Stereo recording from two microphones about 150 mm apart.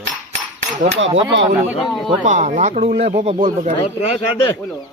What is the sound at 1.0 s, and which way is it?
Speech, 40° right (ahead or behind).